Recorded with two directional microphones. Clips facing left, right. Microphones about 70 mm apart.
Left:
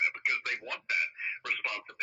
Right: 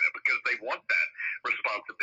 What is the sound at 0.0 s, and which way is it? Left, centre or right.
Speech, right.